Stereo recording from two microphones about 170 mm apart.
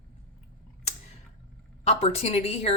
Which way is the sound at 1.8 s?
35° left (ahead or behind).